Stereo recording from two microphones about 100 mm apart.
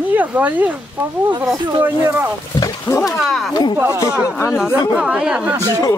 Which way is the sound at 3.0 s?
Centre (ahead or behind).